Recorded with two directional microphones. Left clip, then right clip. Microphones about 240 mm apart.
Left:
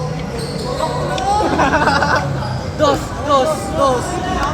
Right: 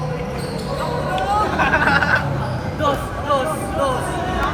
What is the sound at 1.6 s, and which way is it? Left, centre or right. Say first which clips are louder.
Music: even; left.